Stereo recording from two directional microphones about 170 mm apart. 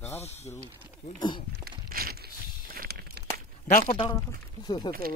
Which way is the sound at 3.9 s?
25° left (ahead or behind).